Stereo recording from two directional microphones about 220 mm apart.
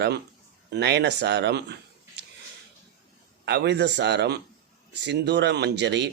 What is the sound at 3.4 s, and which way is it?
A man's voice, 50° right (ahead or behind).